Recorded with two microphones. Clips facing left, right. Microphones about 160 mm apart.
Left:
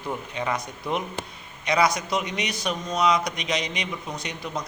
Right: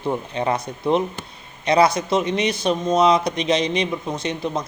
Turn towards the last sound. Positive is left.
turn(degrees=-25)  # may be behind; listen again after turning